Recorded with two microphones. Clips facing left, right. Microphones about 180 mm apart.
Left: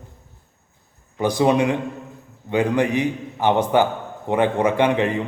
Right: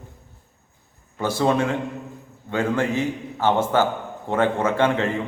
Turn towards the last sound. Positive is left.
turn(degrees=15)  # may be behind; listen again after turning